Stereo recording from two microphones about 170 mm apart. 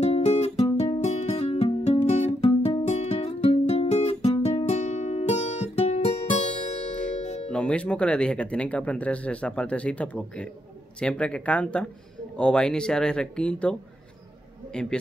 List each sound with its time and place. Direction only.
0.0 s music: 40° left (ahead or behind)
7.5 s a man's voice: 5° left (ahead or behind)